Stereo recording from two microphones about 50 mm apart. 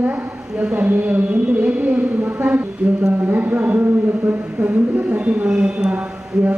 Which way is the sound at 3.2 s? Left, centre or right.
Right.